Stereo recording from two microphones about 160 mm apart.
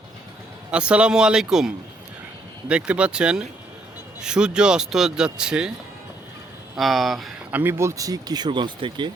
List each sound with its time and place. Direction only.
0.7 s speech: 5° right (ahead or behind)
6.7 s speech: centre (ahead or behind)
7.6 s speech: 15° right (ahead or behind)